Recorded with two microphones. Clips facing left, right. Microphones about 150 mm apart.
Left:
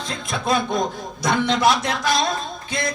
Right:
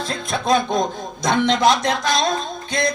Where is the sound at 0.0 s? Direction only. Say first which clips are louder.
Right 3 dB; centre (ahead or behind).